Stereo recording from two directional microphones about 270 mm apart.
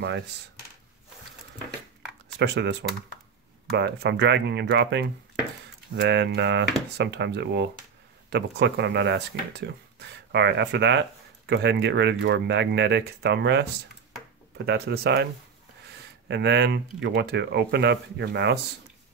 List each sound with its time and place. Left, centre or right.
2.3 s speech: right
14.7 s speech: right
16.3 s speech: right